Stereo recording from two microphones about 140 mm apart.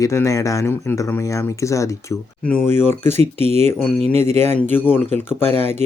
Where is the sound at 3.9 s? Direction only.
45° right (ahead or behind).